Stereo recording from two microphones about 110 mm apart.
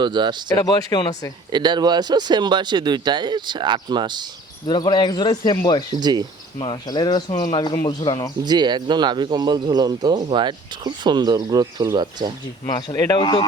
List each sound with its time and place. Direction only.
0.0 s speech: 45° right (ahead or behind)
0.5 s speech: 35° left (ahead or behind)
1.5 s speech: 40° right (ahead or behind)
4.6 s speech: 40° left (ahead or behind)
6.0 s speech: 40° right (ahead or behind)
6.6 s speech: 45° left (ahead or behind)
8.4 s speech: 40° right (ahead or behind)
12.9 s speech: 35° left (ahead or behind)